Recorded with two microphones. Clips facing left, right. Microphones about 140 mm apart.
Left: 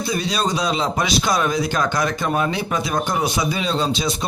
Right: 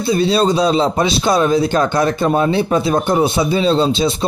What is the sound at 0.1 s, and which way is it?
Speech, 30° right (ahead or behind).